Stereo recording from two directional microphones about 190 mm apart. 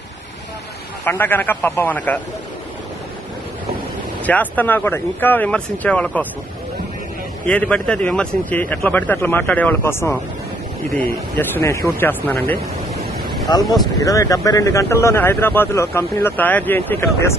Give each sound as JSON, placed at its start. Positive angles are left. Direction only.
{"t": 1.0, "sound": "a man's voice", "side_deg": 10}
{"t": 4.2, "sound": "a man's voice", "side_deg": 10}
{"t": 7.4, "sound": "a man's voice", "side_deg": 5}
{"t": 13.5, "sound": "a man's voice", "side_deg": 20}